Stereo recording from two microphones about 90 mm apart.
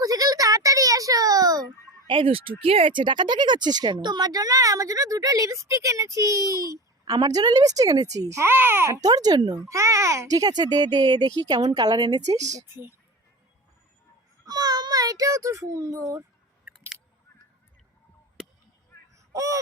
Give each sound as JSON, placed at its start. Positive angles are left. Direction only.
{"t": 0.0, "sound": "a sound", "side_deg": -45}
{"t": 2.0, "sound": "speech", "side_deg": -80}
{"t": 9.0, "sound": "speech", "side_deg": -45}
{"t": 14.4, "sound": "a child's voice", "side_deg": -45}
{"t": 19.3, "sound": "honk", "side_deg": -35}